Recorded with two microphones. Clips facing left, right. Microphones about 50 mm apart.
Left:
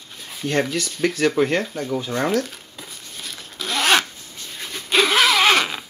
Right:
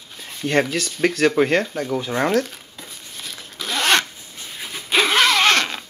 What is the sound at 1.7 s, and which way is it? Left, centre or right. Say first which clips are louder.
Speech: right 1 dB; centre.